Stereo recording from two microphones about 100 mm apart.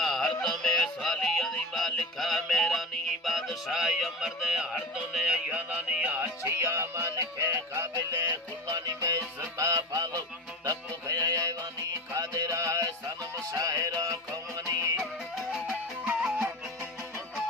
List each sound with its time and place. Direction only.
0.0 s music: 5° left (ahead or behind); by 6.5 s 15° right (ahead or behind)
6.6 s music: 30° right (ahead or behind)
16.0 s music: 15° right (ahead or behind)